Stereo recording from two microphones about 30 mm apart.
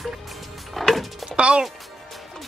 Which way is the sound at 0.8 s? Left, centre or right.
Centre.